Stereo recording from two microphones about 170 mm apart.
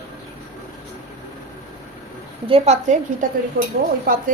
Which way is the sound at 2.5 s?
40° right (ahead or behind).